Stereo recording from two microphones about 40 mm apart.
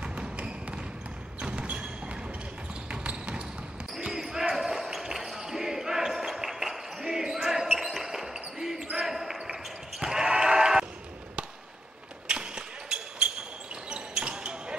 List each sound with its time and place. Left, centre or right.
0.0 s basketball bounce: right
1.4 s music: right
2.9 s basketball bounce: right
4.0 s basketball bounce: centre
12.3 s basketball bounce: right